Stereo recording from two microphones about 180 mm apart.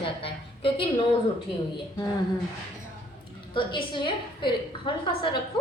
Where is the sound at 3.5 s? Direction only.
25° left (ahead or behind).